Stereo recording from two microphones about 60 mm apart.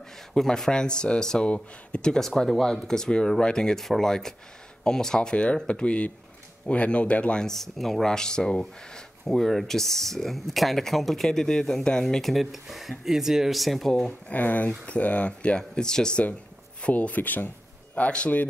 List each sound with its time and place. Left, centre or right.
0.3 s speech: centre
7.4 s speech: centre
14.3 s speech: left
16.8 s speech: left